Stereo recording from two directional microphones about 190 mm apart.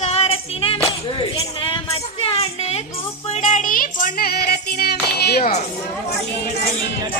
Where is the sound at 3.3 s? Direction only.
40° left (ahead or behind); by 5.5 s 55° left (ahead or behind).